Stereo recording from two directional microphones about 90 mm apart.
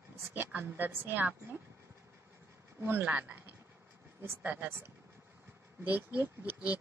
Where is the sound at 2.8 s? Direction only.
20° right (ahead or behind).